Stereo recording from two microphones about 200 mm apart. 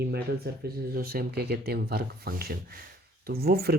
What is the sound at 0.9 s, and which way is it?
Speech, 50° right (ahead or behind).